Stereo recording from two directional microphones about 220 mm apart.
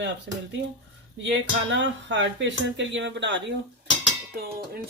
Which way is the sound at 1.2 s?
55° right (ahead or behind).